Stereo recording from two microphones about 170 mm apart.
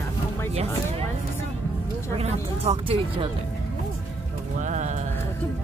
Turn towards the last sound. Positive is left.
turn(degrees=-45)  # may be behind; listen again after turning